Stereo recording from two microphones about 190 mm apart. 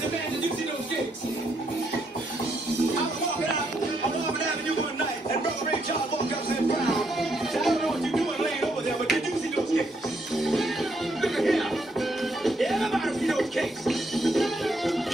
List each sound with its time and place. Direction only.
6.9 s music: centre (ahead or behind)
10.3 s music: centre (ahead or behind)